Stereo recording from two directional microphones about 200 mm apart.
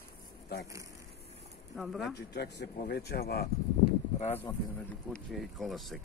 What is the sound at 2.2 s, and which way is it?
Speech, 55° left (ahead or behind).